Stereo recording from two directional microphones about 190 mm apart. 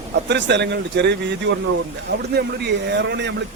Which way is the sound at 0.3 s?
65° right (ahead or behind).